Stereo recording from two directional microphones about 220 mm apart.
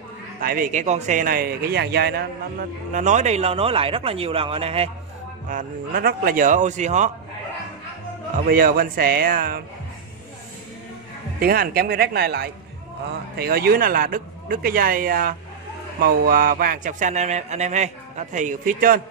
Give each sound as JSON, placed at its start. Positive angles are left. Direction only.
{"t": 0.4, "sound": "speech", "side_deg": -40}
{"t": 2.9, "sound": "speech", "side_deg": -35}
{"t": 5.5, "sound": "speech", "side_deg": -40}
{"t": 8.5, "sound": "speech", "side_deg": -40}
{"t": 11.3, "sound": "speech", "side_deg": -40}